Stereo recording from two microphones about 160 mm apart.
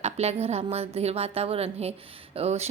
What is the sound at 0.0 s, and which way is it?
A woman's voice, 40° right (ahead or behind).